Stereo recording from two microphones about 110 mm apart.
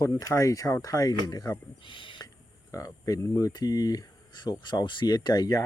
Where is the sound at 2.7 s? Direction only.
30° left (ahead or behind).